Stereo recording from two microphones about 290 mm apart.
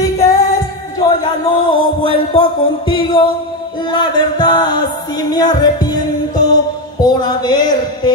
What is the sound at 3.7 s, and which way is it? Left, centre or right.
Music, centre.